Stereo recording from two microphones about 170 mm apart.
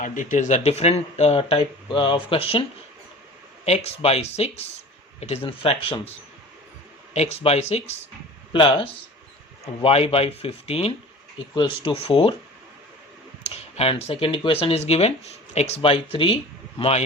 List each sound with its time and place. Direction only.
0.0 s speech: 50° left (ahead or behind); by 12.3 s 35° left (ahead or behind)
13.7 s a man's voice: 35° left (ahead or behind)